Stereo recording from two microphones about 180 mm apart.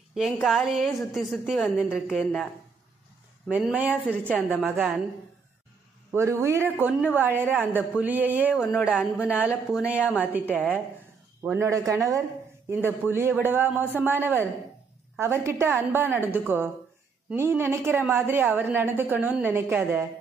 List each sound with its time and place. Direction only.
0.1 s a woman's voice: centre (ahead or behind)
3.4 s a woman's voice: 10° right (ahead or behind)
6.1 s a woman's voice: 15° right (ahead or behind)
11.4 s a woman's voice: 15° right (ahead or behind)